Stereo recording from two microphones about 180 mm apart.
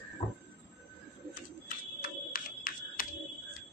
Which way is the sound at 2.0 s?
50° left (ahead or behind).